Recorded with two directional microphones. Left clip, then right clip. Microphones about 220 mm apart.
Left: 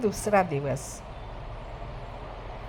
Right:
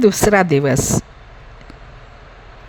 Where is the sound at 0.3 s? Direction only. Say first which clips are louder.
Right 11 dB; 45° right (ahead or behind).